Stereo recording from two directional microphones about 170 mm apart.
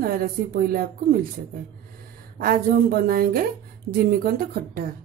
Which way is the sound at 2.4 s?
60° right (ahead or behind).